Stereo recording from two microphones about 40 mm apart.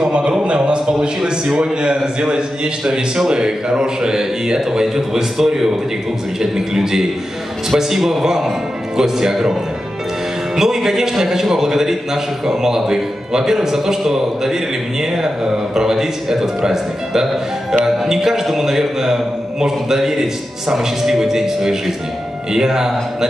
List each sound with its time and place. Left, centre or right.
0.0 s a man's voice: right